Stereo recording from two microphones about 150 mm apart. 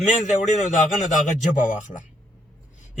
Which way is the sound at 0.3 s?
55° left (ahead or behind).